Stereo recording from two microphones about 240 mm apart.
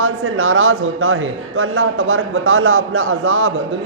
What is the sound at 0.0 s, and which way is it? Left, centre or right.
A man's voice, right.